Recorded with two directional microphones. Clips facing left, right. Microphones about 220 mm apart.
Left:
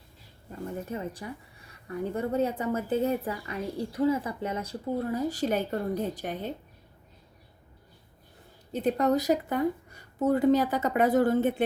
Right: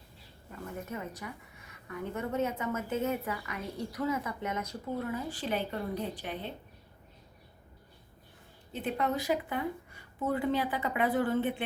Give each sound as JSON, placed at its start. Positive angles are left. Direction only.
{"t": 0.5, "sound": "a woman's voice", "side_deg": 30}
{"t": 8.7, "sound": "a woman's voice", "side_deg": 40}